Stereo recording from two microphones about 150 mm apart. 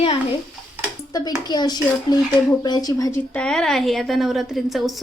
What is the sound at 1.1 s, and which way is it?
Speech, 25° left (ahead or behind).